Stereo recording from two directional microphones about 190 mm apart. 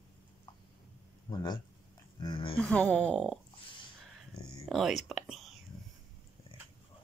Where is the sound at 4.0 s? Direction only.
Centre (ahead or behind).